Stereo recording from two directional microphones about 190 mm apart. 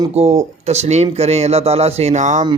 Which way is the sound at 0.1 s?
35° right (ahead or behind).